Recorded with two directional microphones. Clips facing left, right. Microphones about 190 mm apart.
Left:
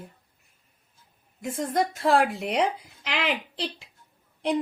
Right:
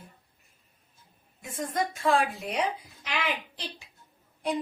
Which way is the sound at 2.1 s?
70° left (ahead or behind).